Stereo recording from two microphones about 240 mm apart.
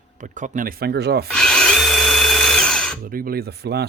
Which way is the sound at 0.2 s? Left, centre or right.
Right.